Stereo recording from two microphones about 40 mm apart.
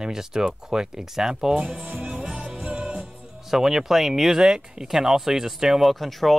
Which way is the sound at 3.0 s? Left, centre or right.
Centre.